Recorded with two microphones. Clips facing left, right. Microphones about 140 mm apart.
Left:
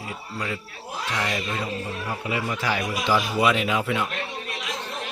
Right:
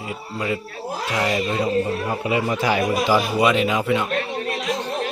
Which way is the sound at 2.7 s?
45° right (ahead or behind).